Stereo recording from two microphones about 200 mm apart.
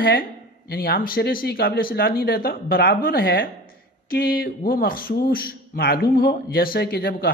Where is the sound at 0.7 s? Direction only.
50° left (ahead or behind).